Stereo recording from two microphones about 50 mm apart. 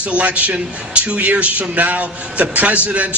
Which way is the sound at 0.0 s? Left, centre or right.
Right.